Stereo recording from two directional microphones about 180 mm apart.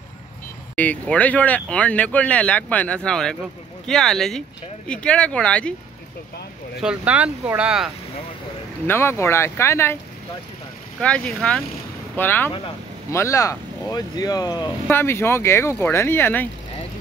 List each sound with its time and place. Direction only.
0.7 s speech: 5° left (ahead or behind)
6.8 s speech: 5° right (ahead or behind)
8.8 s speech: 15° left (ahead or behind)
11.0 s speech: 5° left (ahead or behind)